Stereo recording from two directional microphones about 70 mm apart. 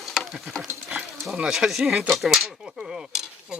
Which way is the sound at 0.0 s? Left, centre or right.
Centre.